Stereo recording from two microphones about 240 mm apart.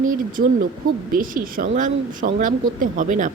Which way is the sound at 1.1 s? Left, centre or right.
Right.